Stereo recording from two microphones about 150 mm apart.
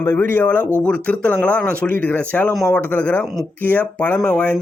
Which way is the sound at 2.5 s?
Centre (ahead or behind).